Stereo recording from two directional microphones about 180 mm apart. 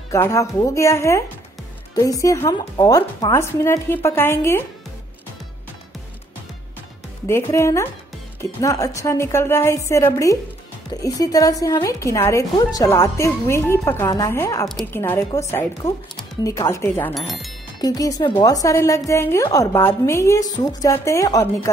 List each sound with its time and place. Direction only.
0.1 s a woman's voice: 15° left (ahead or behind)
7.2 s a woman's voice: 15° left (ahead or behind)
14.7 s a woman's voice: centre (ahead or behind)
15.0 s a woman's voice: 15° left (ahead or behind)